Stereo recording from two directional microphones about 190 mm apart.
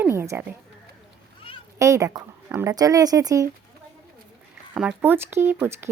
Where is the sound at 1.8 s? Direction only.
15° right (ahead or behind).